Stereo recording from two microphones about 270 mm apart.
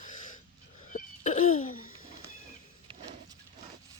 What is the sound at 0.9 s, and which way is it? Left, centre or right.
Cough, left.